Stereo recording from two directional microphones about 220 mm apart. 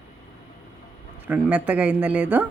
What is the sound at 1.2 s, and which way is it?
Speech, 5° right (ahead or behind).